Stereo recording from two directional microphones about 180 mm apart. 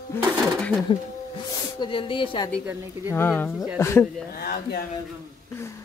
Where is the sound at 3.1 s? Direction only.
10° left (ahead or behind).